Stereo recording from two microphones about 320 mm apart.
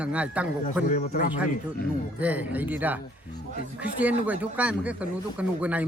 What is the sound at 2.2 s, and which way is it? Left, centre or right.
Speech, centre.